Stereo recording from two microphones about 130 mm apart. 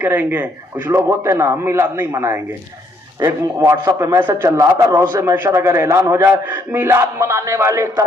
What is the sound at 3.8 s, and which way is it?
Speech, 30° right (ahead or behind).